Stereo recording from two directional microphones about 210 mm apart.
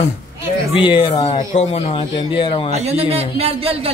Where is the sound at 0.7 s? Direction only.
25° left (ahead or behind).